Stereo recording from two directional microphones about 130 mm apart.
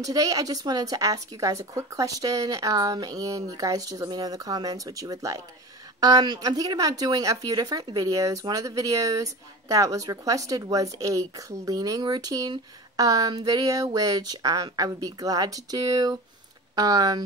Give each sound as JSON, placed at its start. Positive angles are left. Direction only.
{"t": 0.0, "sound": "speech", "side_deg": -25}